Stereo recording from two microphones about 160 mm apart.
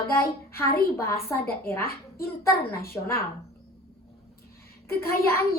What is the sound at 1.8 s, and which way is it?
Speech, 70° left (ahead or behind).